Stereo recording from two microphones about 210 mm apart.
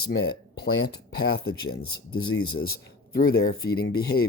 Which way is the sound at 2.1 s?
85° left.